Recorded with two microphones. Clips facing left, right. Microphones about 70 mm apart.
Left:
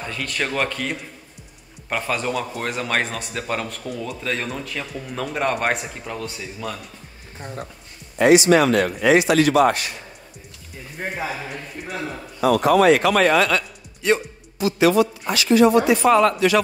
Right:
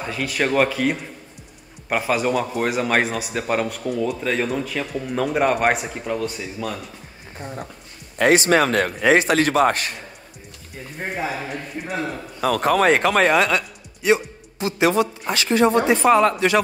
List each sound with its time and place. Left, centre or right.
0.0 s speech: centre
8.2 s speech: right
11.0 s speech: centre
12.4 s a man's voice: right; by 14.2 s centre
14.6 s speech: right